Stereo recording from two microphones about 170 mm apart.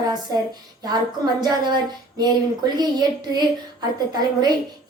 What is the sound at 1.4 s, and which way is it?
A woman's voice, 25° right (ahead or behind).